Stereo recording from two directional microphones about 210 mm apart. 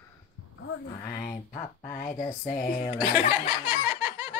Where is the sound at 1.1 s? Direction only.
45° left (ahead or behind).